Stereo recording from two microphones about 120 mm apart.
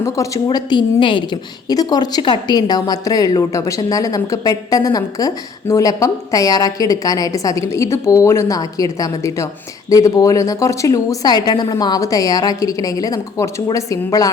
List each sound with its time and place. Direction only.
0.4 s a woman's voice: 40° left (ahead or behind)